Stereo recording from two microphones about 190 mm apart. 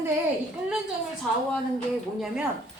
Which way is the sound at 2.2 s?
5° right (ahead or behind).